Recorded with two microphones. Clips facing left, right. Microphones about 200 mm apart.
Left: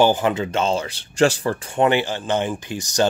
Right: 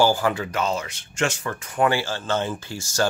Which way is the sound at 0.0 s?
20° left (ahead or behind).